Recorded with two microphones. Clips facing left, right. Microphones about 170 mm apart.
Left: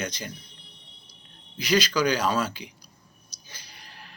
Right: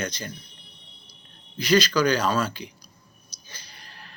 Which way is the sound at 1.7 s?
15° left (ahead or behind).